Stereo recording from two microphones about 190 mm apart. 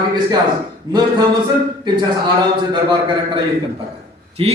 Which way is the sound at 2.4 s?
20° right (ahead or behind).